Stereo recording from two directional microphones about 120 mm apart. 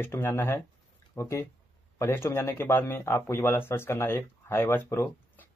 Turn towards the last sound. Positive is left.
turn(degrees=20)  # may be behind; listen again after turning